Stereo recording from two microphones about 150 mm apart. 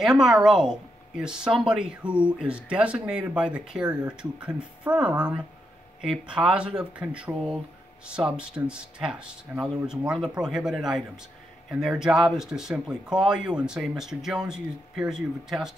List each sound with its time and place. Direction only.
0.0 s a woman's voice: 5° right (ahead or behind)